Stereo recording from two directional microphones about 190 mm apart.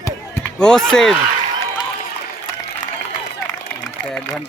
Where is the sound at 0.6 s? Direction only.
5° left (ahead or behind).